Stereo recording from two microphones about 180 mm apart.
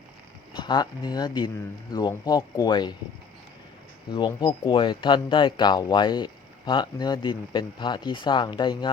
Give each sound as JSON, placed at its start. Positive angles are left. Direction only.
{"t": 0.5, "sound": "speech", "side_deg": 25}
{"t": 4.1, "sound": "speech", "side_deg": 25}